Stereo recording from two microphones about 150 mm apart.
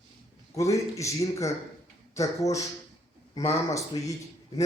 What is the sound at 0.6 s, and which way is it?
Speech, 20° left (ahead or behind).